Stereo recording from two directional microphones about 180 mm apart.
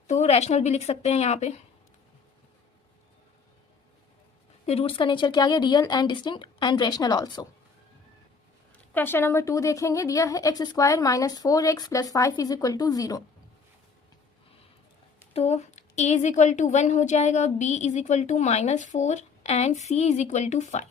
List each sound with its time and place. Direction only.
0.1 s a woman's voice: 40° left (ahead or behind)
4.6 s speech: 35° left (ahead or behind)
8.9 s speech: 10° left (ahead or behind)
15.3 s a woman's voice: 35° left (ahead or behind)